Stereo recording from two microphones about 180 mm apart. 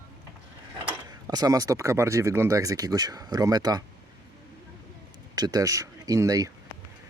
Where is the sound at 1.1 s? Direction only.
20° right (ahead or behind).